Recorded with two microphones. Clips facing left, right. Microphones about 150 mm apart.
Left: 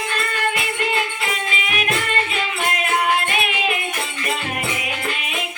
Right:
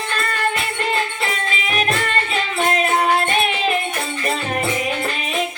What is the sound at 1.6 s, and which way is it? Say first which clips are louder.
Music: right 4 dB; 35° right (ahead or behind).